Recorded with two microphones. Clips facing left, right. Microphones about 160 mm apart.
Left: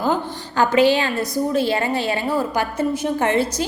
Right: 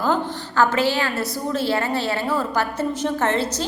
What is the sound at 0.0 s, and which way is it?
A woman's voice, 15° left (ahead or behind).